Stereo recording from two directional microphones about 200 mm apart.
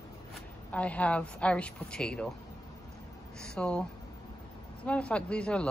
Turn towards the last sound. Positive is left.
turn(degrees=5)  # may be behind; listen again after turning